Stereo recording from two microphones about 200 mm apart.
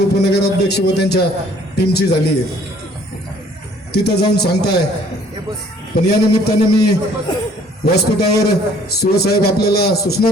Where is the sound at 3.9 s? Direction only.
55° left (ahead or behind).